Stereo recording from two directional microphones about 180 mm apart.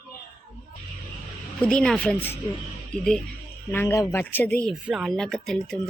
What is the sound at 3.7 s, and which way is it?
Speech, 15° left (ahead or behind).